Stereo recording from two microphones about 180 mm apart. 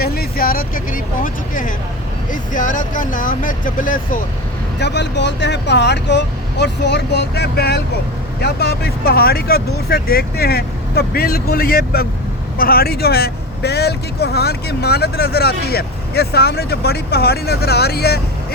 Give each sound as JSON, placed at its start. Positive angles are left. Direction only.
{"t": 0.0, "sound": "speech", "side_deg": 60}
{"t": 4.8, "sound": "a man's voice", "side_deg": 70}